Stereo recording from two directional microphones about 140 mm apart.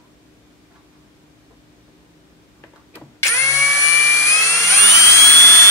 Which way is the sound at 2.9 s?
20° left (ahead or behind).